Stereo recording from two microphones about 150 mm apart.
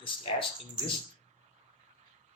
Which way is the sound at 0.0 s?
35° left (ahead or behind).